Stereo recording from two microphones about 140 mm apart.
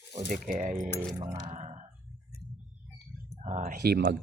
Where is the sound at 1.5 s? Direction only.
55° right (ahead or behind).